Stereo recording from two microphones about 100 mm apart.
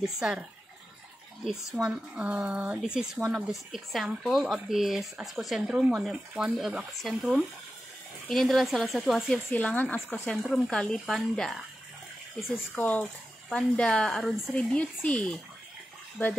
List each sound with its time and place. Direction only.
0.0 s speech: 5° right (ahead or behind)
9.8 s speech: 15° left (ahead or behind)
12.7 s speech: 15° left (ahead or behind)
14.5 s speech: 10° left (ahead or behind)